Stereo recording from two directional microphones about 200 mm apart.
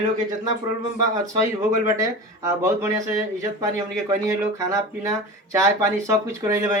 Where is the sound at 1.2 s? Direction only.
15° right (ahead or behind).